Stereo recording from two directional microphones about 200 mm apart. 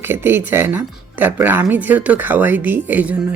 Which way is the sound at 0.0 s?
10° right (ahead or behind).